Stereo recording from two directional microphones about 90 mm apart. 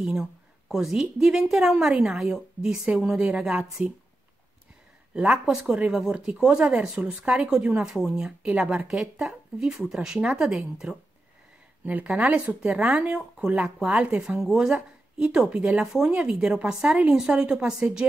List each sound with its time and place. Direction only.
0.0 s a woman's voice: centre (ahead or behind)
5.1 s a woman's voice: 15° right (ahead or behind)
11.8 s speech: 15° right (ahead or behind)
14.2 s a woman's voice: 5° right (ahead or behind)